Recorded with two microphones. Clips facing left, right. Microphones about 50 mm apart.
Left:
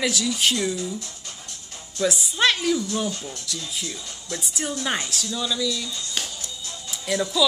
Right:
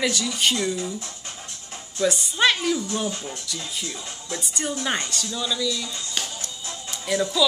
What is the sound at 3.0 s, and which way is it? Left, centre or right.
Speech, right.